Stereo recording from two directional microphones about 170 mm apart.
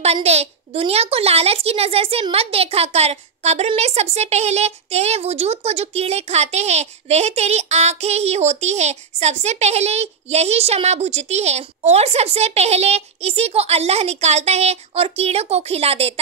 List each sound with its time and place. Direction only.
0.0 s a child's voice: 40° right (ahead or behind)